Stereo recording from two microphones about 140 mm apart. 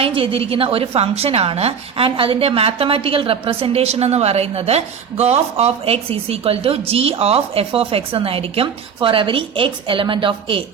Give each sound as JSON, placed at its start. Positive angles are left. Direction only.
{"t": 0.0, "sound": "a woman's voice", "side_deg": -40}